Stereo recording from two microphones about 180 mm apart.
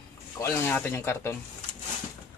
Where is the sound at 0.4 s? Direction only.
10° left (ahead or behind).